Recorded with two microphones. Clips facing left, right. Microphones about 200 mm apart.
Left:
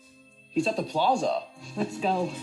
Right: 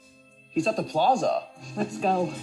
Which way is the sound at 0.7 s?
45° right (ahead or behind).